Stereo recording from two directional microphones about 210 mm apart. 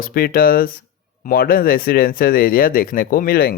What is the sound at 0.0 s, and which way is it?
Speech, 45° left (ahead or behind).